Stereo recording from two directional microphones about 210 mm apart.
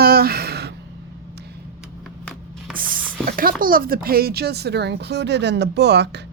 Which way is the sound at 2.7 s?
40° right (ahead or behind).